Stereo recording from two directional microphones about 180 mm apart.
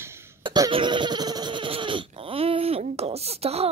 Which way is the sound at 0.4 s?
25° right (ahead or behind).